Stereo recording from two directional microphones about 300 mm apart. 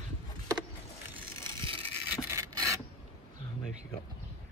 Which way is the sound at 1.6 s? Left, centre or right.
Centre.